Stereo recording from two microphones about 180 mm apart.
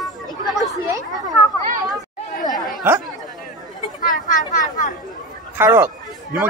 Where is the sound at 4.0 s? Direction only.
50° left (ahead or behind).